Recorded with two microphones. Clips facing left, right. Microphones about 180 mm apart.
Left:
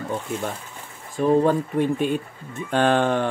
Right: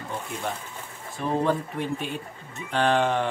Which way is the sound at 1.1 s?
50° left (ahead or behind).